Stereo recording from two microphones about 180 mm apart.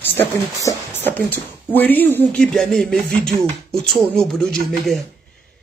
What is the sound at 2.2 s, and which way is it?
Music, 5° left (ahead or behind).